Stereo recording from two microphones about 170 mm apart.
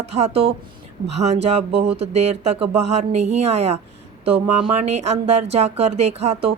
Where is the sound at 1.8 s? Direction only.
35° right (ahead or behind).